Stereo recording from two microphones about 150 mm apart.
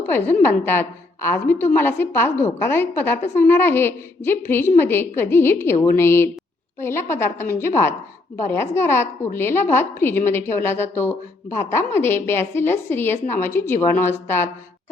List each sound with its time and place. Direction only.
0.4 s a woman's voice: 15° left (ahead or behind)